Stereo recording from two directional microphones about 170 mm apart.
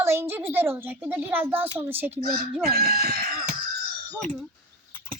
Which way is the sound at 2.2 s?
60° right (ahead or behind).